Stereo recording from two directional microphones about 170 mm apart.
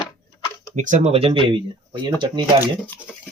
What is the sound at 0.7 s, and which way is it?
Speech, 45° right (ahead or behind).